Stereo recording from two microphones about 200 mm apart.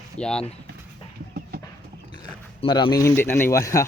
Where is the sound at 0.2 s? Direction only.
5° left (ahead or behind).